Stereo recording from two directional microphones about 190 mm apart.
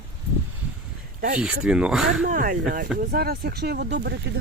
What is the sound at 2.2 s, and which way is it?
Speech, 45° right (ahead or behind).